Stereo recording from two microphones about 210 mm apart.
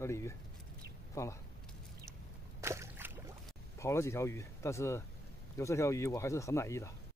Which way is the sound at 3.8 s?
15° left (ahead or behind).